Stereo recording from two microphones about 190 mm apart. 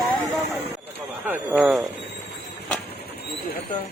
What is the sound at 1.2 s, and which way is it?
Speech, 10° right (ahead or behind).